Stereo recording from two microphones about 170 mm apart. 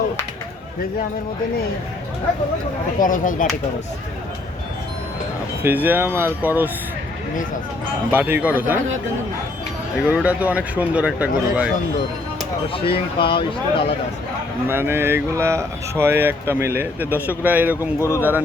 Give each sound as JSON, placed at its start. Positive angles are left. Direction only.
{"t": 3.0, "sound": "speech", "side_deg": 50}
{"t": 5.6, "sound": "speech", "side_deg": -10}
{"t": 8.1, "sound": "speech", "side_deg": -10}
{"t": 10.1, "sound": "speech", "side_deg": -10}
{"t": 12.6, "sound": "speech", "side_deg": 30}
{"t": 14.7, "sound": "speech", "side_deg": -15}
{"t": 17.7, "sound": "speech", "side_deg": 15}
{"t": 18.2, "sound": "speech", "side_deg": -10}